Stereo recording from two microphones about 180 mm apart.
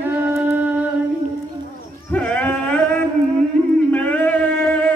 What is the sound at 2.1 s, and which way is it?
Sheep, 5° left (ahead or behind).